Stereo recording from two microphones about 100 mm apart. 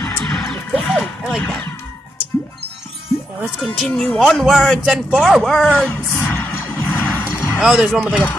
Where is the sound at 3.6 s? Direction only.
Centre (ahead or behind).